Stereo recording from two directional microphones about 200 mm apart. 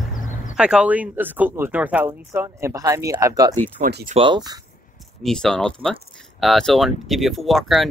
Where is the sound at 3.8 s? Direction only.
50° right (ahead or behind).